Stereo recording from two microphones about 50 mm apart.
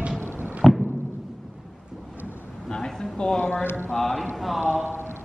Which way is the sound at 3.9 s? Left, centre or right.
Centre.